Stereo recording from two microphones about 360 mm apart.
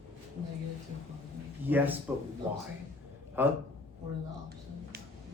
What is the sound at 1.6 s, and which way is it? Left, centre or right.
A man's voice, centre.